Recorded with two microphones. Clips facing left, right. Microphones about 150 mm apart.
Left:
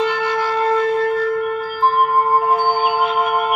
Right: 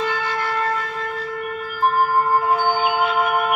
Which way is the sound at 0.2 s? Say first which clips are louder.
Left 5 dB; 15° left (ahead or behind).